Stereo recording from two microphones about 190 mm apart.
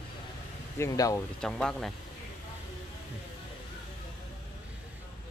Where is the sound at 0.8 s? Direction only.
20° left (ahead or behind).